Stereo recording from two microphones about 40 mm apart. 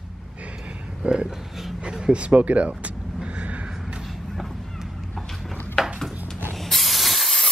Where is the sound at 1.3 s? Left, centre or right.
Centre.